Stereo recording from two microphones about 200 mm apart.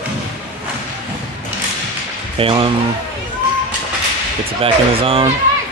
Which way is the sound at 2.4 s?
25° right (ahead or behind).